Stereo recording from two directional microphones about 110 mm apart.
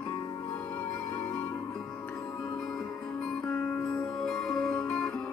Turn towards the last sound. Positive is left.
turn(degrees=5)  # may be behind; listen again after turning